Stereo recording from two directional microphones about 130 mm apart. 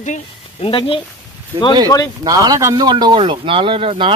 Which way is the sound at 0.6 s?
45° left (ahead or behind).